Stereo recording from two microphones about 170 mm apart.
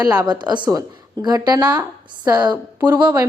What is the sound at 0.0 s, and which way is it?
A woman's voice, 25° right (ahead or behind).